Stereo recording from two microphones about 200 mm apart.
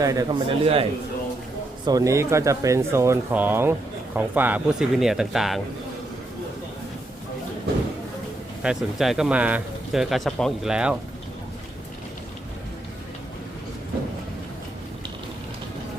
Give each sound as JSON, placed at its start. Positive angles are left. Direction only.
{"t": 0.0, "sound": "speech", "side_deg": -15}
{"t": 1.8, "sound": "speech", "side_deg": -20}
{"t": 8.6, "sound": "speech", "side_deg": 0}